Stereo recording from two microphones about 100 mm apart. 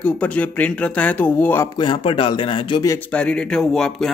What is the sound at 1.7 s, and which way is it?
Speech, 60° left (ahead or behind).